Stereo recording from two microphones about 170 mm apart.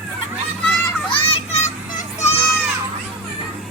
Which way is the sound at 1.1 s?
35° left (ahead or behind).